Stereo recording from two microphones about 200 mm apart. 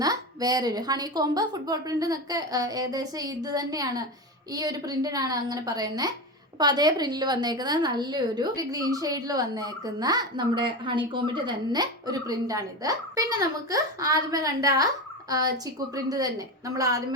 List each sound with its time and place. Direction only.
0.0 s a woman's voice: 20° right (ahead or behind)